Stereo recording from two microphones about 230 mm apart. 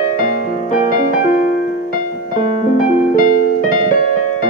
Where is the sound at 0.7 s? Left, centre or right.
Left.